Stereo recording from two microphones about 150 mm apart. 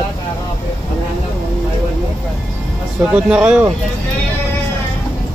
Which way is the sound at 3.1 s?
5° right (ahead or behind).